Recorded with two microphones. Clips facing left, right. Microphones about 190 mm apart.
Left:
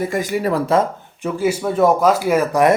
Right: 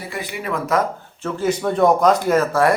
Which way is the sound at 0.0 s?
45° left (ahead or behind).